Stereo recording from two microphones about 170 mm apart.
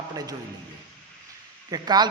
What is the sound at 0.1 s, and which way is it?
Speech, 20° right (ahead or behind).